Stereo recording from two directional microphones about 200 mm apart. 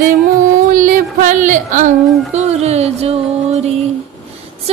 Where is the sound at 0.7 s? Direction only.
40° right (ahead or behind).